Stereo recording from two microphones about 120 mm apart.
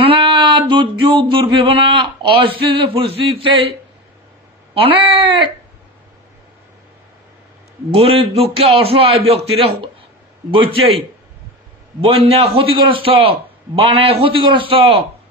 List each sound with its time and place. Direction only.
0.1 s a sound: 40° right (ahead or behind)
4.7 s a man's voice: 50° right (ahead or behind)
7.9 s a man's voice: 50° right (ahead or behind)